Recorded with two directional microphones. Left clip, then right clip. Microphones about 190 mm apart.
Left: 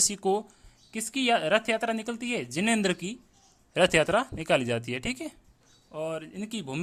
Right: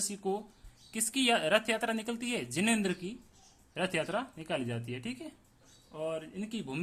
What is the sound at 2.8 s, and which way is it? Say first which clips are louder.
Speech: left 7 dB; 40° left (ahead or behind).